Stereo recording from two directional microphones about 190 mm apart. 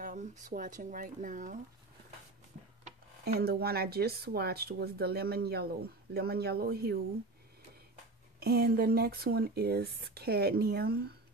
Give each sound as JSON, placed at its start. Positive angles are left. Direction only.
{"t": 0.0, "sound": "speech", "side_deg": -40}
{"t": 3.3, "sound": "speech", "side_deg": -55}
{"t": 8.4, "sound": "speech", "side_deg": -55}